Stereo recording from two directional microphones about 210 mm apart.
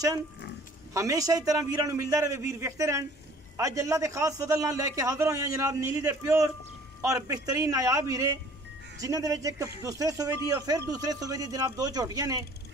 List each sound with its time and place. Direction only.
0.9 s speech: 15° right (ahead or behind)